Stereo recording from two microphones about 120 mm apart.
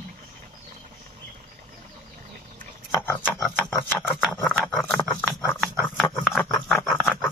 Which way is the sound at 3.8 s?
15° left (ahead or behind).